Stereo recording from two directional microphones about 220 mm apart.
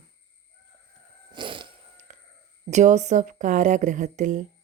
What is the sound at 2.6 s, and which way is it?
Speech, 30° right (ahead or behind).